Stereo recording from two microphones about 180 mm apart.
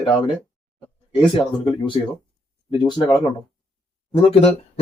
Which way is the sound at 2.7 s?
25° left (ahead or behind).